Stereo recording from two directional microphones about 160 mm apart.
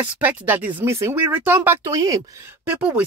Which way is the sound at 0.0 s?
10° right (ahead or behind).